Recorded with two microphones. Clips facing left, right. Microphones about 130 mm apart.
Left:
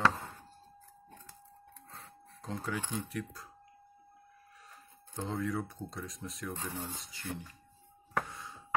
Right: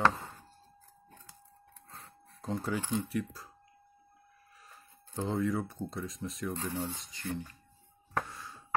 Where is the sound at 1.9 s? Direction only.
5° right (ahead or behind).